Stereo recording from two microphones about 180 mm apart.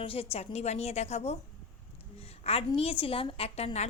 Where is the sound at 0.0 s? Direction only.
30° left (ahead or behind).